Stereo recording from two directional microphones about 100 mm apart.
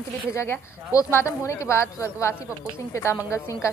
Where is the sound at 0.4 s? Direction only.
25° left (ahead or behind).